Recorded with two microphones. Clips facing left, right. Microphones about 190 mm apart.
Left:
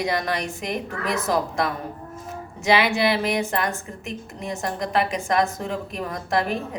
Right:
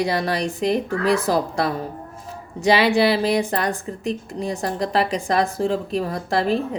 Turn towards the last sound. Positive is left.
turn(degrees=-30)  # may be behind; listen again after turning